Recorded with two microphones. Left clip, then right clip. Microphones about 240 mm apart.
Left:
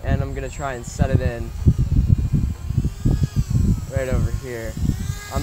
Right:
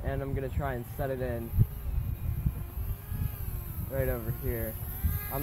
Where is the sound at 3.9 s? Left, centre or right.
Left.